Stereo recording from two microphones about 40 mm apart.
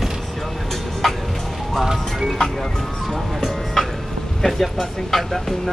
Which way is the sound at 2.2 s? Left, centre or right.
Centre.